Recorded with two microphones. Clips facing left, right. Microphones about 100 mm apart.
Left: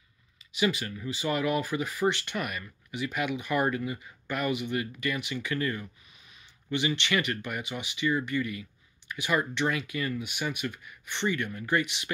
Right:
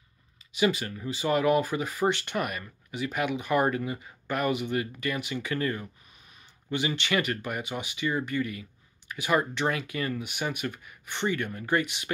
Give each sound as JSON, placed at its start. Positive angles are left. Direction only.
{"t": 0.6, "sound": "speech", "side_deg": -40}
{"t": 3.6, "sound": "speech", "side_deg": -30}
{"t": 6.7, "sound": "speech", "side_deg": -40}
{"t": 8.4, "sound": "speech", "side_deg": -30}